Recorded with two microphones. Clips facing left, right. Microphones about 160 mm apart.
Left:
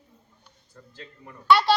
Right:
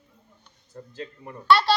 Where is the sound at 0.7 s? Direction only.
30° right (ahead or behind).